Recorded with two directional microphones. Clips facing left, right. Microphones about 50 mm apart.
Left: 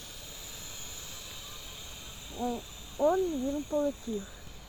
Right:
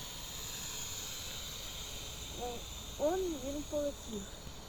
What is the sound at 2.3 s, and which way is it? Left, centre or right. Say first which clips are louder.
Speech: left 9 dB; centre.